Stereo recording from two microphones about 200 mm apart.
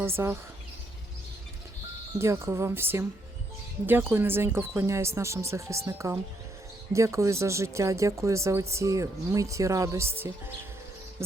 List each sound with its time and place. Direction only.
0.2 s speech: 15° right (ahead or behind)
2.1 s speech: 15° right (ahead or behind)